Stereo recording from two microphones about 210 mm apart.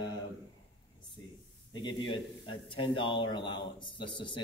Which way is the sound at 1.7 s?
20° left (ahead or behind).